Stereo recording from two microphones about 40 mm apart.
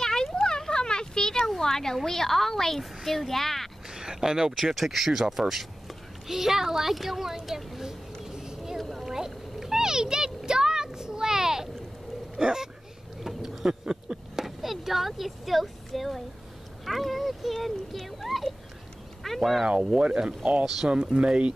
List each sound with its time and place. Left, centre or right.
0.0 s a sound: centre
2.0 s speech: centre
3.9 s speech: centre
8.2 s a sound: centre
12.4 s speech: centre
13.2 s a sound: centre
16.8 s speech: centre
19.9 s speech: right
20.6 s speech: centre
20.9 s speech: right